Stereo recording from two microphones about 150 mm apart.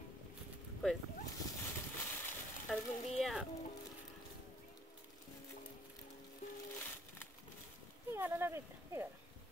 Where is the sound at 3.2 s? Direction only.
Centre (ahead or behind).